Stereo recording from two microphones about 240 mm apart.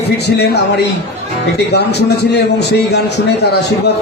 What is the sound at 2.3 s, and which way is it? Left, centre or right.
A man's voice, left.